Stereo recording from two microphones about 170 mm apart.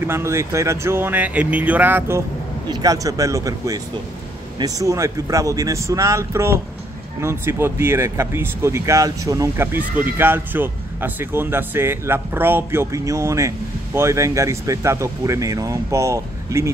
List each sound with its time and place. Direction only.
0.0 s speech: 15° right (ahead or behind)